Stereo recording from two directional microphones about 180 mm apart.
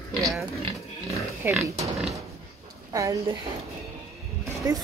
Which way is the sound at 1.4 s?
10° right (ahead or behind).